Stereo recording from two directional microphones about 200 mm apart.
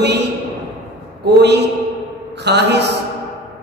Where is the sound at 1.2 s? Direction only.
60° right (ahead or behind).